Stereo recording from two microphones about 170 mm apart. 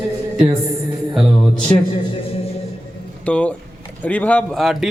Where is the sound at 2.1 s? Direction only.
35° left (ahead or behind).